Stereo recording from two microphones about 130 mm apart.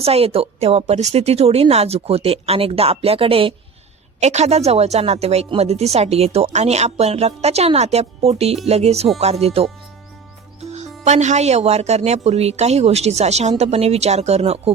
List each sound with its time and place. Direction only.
0.0 s a woman's voice: 50° right (ahead or behind)
4.2 s a woman's voice: 55° right (ahead or behind)
10.7 s speech: 60° right (ahead or behind)